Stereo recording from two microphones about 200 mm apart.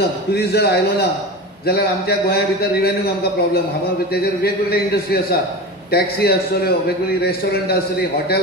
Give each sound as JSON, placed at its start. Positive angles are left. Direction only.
{"t": 0.3, "sound": "a man's voice", "side_deg": 55}
{"t": 4.1, "sound": "a man's voice", "side_deg": 50}